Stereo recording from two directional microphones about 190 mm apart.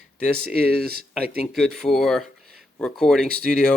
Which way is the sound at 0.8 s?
55° right (ahead or behind).